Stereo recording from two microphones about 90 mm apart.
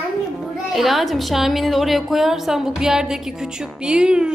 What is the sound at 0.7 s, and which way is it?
A woman's voice, centre (ahead or behind).